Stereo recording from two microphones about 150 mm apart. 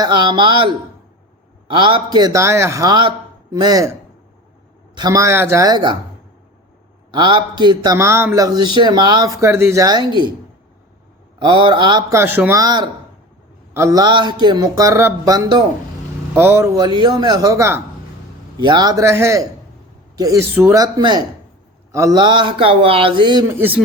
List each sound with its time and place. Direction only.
0.0 s speech: 30° right (ahead or behind)
1.7 s a man's voice: 30° right (ahead or behind)
4.9 s a man's voice: 25° right (ahead or behind)
7.1 s a man's voice: 30° right (ahead or behind)
7.9 s a man's voice: 20° right (ahead or behind)
11.3 s speech: 30° right (ahead or behind)
12.2 s a man's voice: 15° right (ahead or behind)
16.3 s speech: 15° right (ahead or behind)
16.7 s a man's voice: 30° right (ahead or behind)
20.8 s a man's voice: 30° right (ahead or behind)
23.5 s speech: 15° right (ahead or behind)